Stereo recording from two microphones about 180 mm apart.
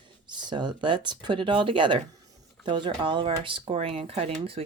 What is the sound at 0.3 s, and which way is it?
Speech, 25° right (ahead or behind).